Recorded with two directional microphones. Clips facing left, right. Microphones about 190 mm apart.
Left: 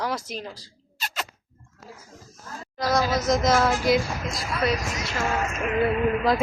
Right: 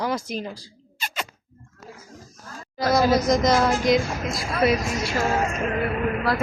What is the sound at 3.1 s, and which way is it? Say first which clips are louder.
Speech: right 2 dB; 5° left (ahead or behind).